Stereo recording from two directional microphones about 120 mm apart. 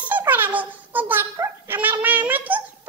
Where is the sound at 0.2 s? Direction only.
15° right (ahead or behind).